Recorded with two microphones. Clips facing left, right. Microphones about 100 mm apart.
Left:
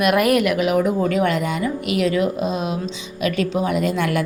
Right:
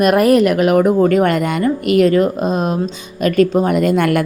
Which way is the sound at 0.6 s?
50° right (ahead or behind).